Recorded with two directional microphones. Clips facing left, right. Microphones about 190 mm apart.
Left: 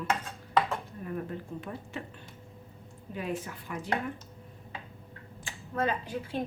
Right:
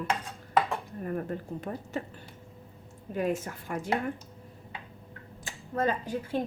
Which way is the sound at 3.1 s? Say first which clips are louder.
Right 5 dB; 45° right (ahead or behind).